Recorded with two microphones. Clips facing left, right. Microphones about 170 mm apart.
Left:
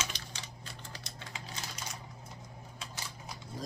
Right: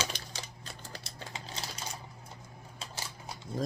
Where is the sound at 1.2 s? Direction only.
30° right (ahead or behind).